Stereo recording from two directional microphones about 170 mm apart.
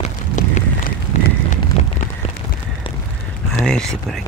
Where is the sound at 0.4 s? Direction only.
45° left (ahead or behind).